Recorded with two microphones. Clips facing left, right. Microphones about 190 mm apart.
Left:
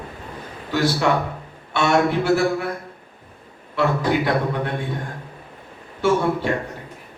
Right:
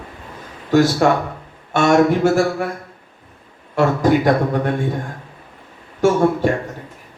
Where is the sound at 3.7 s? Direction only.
45° right (ahead or behind).